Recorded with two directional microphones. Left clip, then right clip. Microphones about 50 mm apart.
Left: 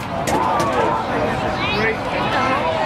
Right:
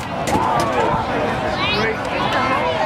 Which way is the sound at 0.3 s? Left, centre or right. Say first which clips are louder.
Even; right.